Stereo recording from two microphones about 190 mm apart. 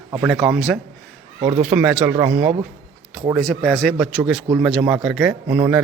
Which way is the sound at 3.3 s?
Centre (ahead or behind).